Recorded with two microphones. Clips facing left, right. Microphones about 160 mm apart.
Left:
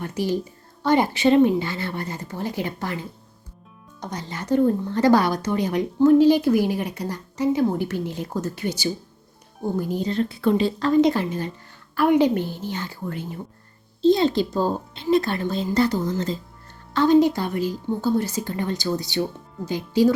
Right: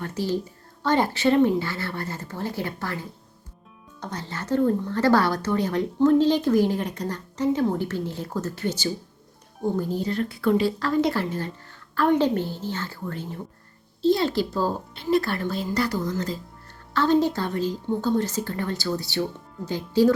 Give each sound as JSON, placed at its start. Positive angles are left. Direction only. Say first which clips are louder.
{"t": 0.0, "sound": "a woman's voice", "louder": "left 2 dB", "side_deg": 15}